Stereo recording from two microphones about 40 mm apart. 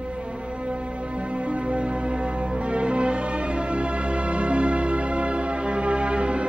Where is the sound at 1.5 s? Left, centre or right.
Right.